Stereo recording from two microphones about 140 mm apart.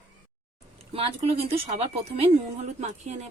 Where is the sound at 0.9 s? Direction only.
45° right (ahead or behind).